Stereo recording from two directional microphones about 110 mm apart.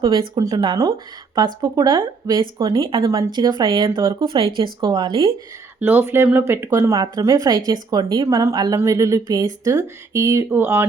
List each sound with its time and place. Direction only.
0.0 s speech: 45° right (ahead or behind)
5.8 s speech: 20° right (ahead or behind)